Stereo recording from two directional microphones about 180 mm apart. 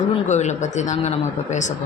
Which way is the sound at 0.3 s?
40° left (ahead or behind).